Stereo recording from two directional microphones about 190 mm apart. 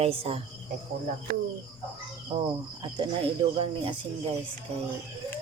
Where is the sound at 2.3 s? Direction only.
25° right (ahead or behind).